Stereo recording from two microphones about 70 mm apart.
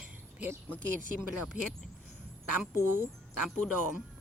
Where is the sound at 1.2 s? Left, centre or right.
Centre.